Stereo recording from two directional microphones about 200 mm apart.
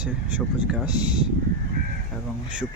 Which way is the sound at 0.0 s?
5° right (ahead or behind).